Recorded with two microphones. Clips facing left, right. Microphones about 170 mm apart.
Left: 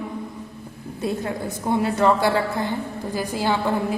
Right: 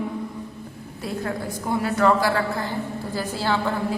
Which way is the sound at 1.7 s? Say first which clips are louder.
Left 1 dB; 20° left (ahead or behind).